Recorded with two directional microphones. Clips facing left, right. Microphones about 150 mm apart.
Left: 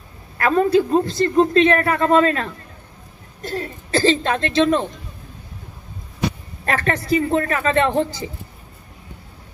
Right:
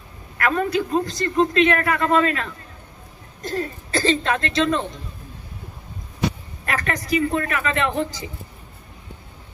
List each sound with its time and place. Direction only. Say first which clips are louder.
0.4 s a man's voice: left 5 dB; 30° left (ahead or behind)
6.6 s a man's voice: left 4 dB; 30° left (ahead or behind)